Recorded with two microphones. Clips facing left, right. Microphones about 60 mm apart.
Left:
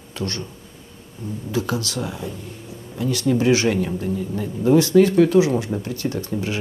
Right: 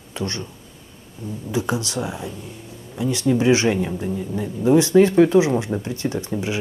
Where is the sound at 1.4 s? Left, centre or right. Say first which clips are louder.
Right 1 dB; centre.